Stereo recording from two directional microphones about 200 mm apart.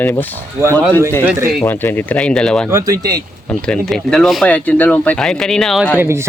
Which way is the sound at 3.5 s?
5° left (ahead or behind).